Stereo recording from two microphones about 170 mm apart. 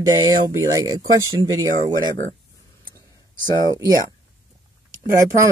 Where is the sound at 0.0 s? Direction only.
20° right (ahead or behind).